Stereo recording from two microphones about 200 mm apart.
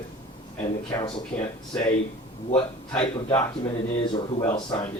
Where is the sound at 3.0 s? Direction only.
25° left (ahead or behind).